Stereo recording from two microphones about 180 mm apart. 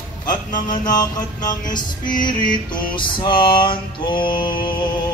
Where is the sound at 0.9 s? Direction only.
20° left (ahead or behind).